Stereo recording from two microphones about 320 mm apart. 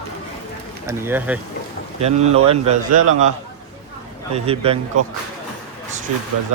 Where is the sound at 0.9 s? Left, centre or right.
Centre.